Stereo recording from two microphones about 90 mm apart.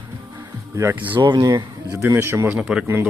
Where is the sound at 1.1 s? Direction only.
60° right (ahead or behind).